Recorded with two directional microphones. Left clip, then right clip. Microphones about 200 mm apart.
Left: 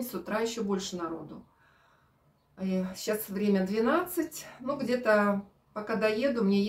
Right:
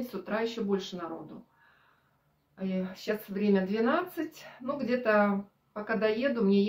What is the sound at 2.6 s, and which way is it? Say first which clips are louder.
Speech: left 2 dB; 5° left (ahead or behind).